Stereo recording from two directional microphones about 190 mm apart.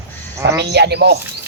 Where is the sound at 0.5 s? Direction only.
60° right (ahead or behind).